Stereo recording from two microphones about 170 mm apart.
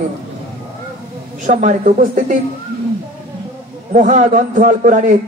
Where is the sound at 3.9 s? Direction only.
45° right (ahead or behind).